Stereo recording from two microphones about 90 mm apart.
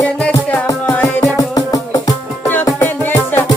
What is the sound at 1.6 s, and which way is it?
Music, 40° left (ahead or behind).